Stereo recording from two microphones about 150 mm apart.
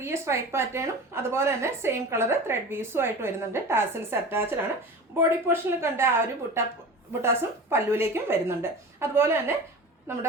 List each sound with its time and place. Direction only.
0.0 s a woman's voice: 15° right (ahead or behind)
7.7 s a woman's voice: 15° right (ahead or behind)